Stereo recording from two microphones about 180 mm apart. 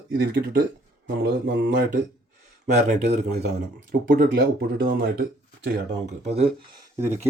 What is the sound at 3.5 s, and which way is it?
Speech, 55° right (ahead or behind).